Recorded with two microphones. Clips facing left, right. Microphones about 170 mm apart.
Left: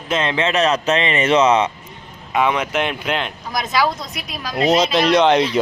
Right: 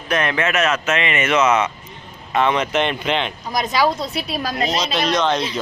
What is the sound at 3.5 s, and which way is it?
Speech, 20° right (ahead or behind).